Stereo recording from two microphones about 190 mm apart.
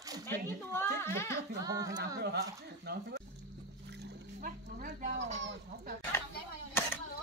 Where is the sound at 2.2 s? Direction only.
60° right (ahead or behind).